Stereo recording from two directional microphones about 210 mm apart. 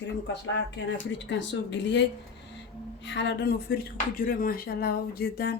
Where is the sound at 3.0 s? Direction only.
55° left (ahead or behind).